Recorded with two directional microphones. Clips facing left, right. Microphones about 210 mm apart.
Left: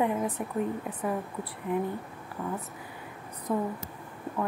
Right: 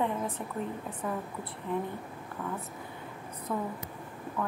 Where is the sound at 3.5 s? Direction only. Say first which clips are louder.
Left 4 dB; 15° left (ahead or behind).